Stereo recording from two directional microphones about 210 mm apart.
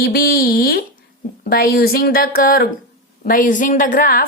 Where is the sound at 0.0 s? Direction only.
45° left (ahead or behind).